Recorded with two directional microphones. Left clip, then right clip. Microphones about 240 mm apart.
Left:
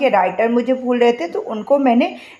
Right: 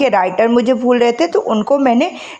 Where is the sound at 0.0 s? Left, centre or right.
Right.